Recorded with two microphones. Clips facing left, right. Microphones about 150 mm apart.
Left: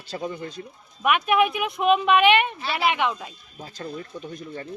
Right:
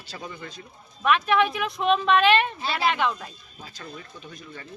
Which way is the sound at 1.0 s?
15° left (ahead or behind).